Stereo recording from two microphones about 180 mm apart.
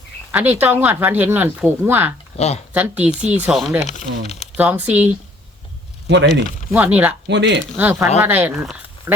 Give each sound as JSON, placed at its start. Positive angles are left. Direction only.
{"t": 0.3, "sound": "speech", "side_deg": -10}
{"t": 2.3, "sound": "speech", "side_deg": 35}
{"t": 2.7, "sound": "speech", "side_deg": -10}
{"t": 6.1, "sound": "speech", "side_deg": -80}
{"t": 6.7, "sound": "speech", "side_deg": -10}
{"t": 7.3, "sound": "speech", "side_deg": -80}
{"t": 7.8, "sound": "speech", "side_deg": -10}